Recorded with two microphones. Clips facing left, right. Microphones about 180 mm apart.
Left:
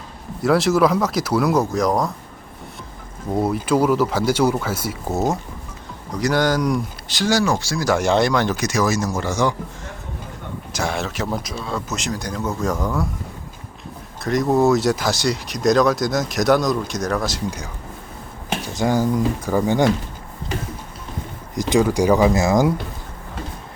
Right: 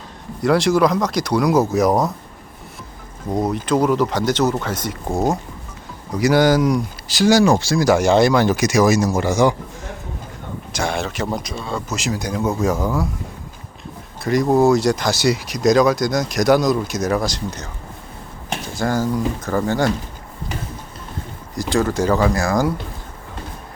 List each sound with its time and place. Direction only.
0.4 s speech: 5° left (ahead or behind)
3.3 s speech: 5° left (ahead or behind)
6.1 s speech: 10° right (ahead or behind)
7.9 s speech: centre (ahead or behind)
10.7 s speech: centre (ahead or behind)
14.2 s speech: centre (ahead or behind)
18.7 s speech: 15° left (ahead or behind)
21.5 s speech: 20° left (ahead or behind)